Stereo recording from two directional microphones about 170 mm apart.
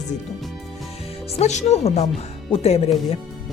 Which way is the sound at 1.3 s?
40° left (ahead or behind).